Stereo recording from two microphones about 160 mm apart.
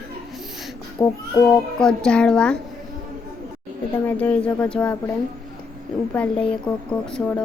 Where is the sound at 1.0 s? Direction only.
20° left (ahead or behind).